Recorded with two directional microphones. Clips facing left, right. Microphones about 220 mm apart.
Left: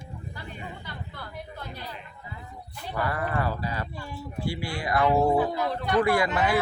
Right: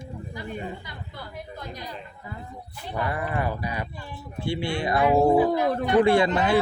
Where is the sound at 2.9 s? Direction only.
20° right (ahead or behind).